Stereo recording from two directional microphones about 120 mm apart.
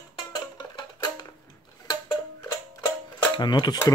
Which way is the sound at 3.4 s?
40° left (ahead or behind).